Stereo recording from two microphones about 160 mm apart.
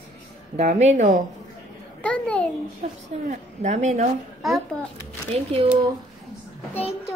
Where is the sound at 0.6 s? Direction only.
45° right (ahead or behind).